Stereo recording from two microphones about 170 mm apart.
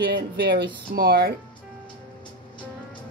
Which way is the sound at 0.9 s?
70° right (ahead or behind).